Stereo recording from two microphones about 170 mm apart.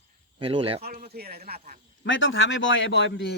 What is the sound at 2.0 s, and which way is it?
Speech, 90° left.